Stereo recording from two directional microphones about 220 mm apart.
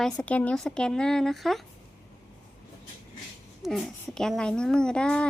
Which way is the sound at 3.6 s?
Centre (ahead or behind).